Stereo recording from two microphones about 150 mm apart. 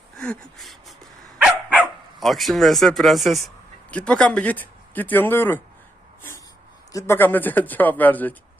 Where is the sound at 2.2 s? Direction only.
Centre (ahead or behind).